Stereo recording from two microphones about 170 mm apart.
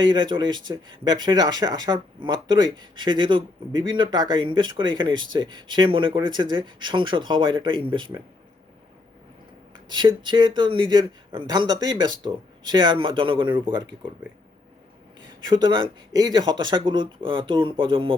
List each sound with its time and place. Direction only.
0.0 s speech: 25° right (ahead or behind)
9.9 s speech: 25° right (ahead or behind)
15.4 s speech: 25° right (ahead or behind)